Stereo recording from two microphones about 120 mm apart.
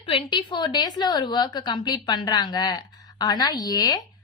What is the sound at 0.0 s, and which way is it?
A woman's voice, 45° left (ahead or behind).